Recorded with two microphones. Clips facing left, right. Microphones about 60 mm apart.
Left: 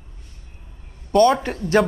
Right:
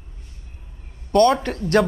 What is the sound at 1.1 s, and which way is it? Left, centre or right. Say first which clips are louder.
Speech: even; centre.